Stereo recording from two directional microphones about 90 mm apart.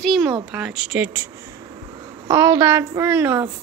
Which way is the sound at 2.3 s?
30° right (ahead or behind).